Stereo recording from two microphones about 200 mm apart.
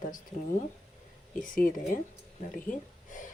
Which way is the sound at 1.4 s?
45° left (ahead or behind).